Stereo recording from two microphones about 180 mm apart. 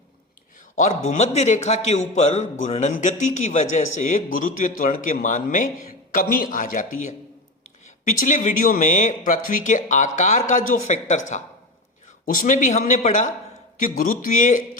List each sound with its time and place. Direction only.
0.8 s a man's voice: 40° left (ahead or behind)
8.2 s a man's voice: 45° left (ahead or behind)